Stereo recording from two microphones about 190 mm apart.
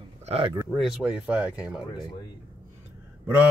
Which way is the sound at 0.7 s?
5° right (ahead or behind).